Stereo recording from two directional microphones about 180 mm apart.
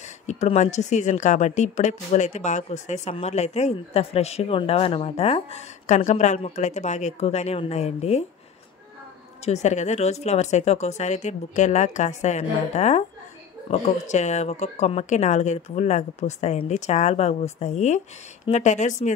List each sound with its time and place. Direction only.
0.3 s speech: 40° left (ahead or behind)
9.4 s speech: 40° left (ahead or behind)